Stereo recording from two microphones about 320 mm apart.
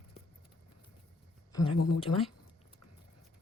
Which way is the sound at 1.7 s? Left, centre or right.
Left.